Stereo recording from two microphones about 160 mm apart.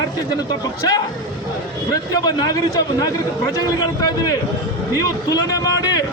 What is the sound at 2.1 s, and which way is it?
A man's voice, 25° left (ahead or behind).